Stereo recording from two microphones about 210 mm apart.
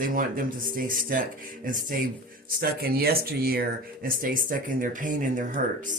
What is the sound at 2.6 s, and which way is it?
Speech, 45° right (ahead or behind).